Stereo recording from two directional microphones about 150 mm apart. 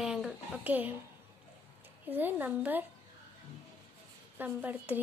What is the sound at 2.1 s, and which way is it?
Speech, 10° right (ahead or behind).